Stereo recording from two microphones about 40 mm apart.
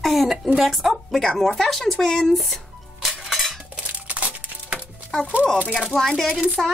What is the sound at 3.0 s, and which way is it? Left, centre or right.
Cutlery, centre.